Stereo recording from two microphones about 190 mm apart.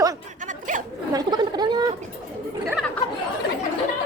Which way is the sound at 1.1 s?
20° right (ahead or behind).